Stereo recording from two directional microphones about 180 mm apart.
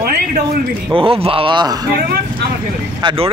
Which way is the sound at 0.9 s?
30° right (ahead or behind).